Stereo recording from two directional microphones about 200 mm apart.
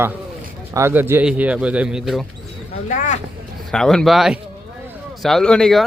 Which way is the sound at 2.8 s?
40° left (ahead or behind).